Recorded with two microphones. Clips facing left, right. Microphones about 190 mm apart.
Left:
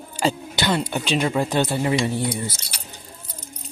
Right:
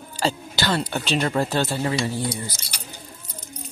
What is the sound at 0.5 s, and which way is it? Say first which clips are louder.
Speech: left 1 dB; 20° left (ahead or behind).